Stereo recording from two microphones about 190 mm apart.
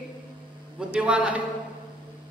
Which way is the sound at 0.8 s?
5° right (ahead or behind).